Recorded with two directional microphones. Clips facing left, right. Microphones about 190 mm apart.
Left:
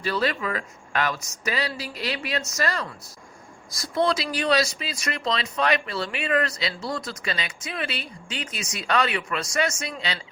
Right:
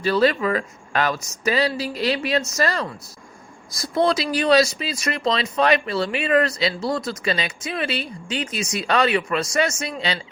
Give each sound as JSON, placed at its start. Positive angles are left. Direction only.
{"t": 0.0, "sound": "speech", "side_deg": -30}
{"t": 4.1, "sound": "speech", "side_deg": -25}